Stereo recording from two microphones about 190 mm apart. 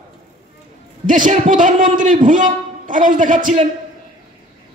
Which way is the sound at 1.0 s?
45° right (ahead or behind).